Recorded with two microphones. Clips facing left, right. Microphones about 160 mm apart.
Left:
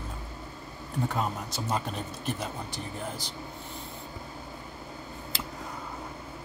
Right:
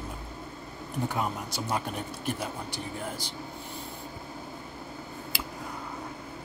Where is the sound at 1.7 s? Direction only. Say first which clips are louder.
Even; 10° right (ahead or behind).